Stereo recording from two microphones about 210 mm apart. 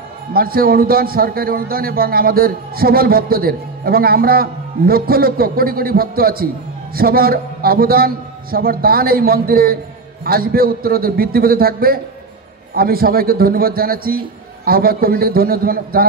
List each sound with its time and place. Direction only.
0.3 s a man's voice: 45° right (ahead or behind)